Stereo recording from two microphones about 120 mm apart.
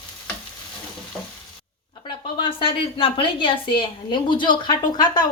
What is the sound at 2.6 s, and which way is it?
A woman's voice, 45° left (ahead or behind).